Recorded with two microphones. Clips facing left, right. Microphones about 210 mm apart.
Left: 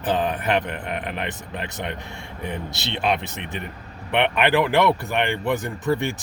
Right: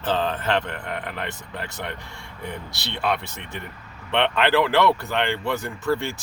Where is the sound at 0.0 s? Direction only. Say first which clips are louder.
Left 1 dB; 15° left (ahead or behind).